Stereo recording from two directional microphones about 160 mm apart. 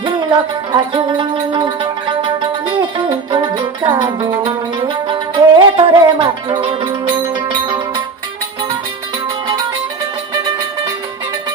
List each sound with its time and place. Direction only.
0.0 s music: 30° right (ahead or behind)